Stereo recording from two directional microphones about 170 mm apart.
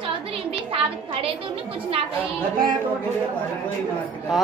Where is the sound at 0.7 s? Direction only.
35° right (ahead or behind).